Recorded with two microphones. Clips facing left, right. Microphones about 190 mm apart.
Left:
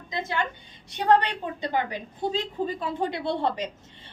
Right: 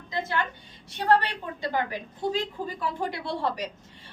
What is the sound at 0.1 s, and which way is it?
A woman's voice, 15° left (ahead or behind).